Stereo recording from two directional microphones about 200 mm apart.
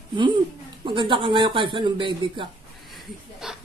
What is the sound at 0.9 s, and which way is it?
Speech, 25° right (ahead or behind).